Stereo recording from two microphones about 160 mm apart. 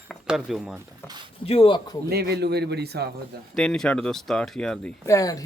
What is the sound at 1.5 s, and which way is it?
Speech, 35° left (ahead or behind).